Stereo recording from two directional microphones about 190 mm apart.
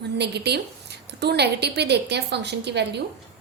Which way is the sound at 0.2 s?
60° right (ahead or behind).